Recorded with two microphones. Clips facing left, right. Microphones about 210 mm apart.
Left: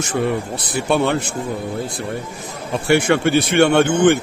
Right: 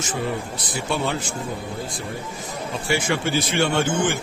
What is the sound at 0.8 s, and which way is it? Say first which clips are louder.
Speech: left 7 dB; 65° left (ahead or behind).